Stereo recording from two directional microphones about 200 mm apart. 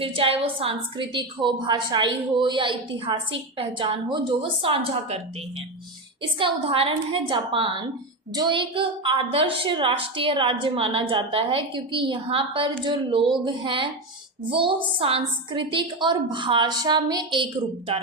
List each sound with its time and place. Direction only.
0.0 s a woman's voice: 25° right (ahead or behind)
6.4 s a woman's voice: 25° right (ahead or behind)